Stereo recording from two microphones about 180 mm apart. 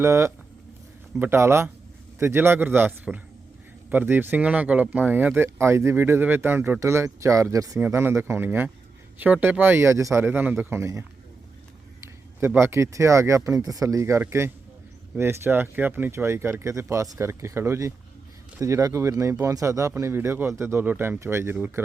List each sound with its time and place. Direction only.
0.0 s speech: 15° right (ahead or behind)